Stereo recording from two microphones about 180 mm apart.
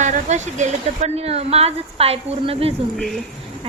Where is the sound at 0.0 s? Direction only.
40° right (ahead or behind).